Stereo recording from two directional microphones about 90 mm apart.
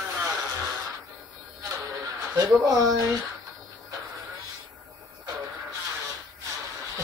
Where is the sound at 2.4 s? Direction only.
40° right (ahead or behind).